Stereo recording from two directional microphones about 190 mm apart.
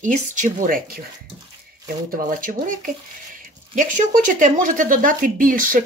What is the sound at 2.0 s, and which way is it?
A woman's voice, 45° right (ahead or behind).